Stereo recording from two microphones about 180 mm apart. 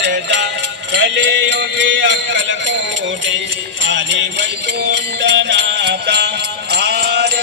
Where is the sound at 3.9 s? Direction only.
80° right.